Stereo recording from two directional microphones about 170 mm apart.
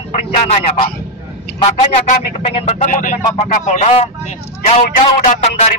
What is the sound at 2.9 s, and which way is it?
A man's voice, 50° left (ahead or behind).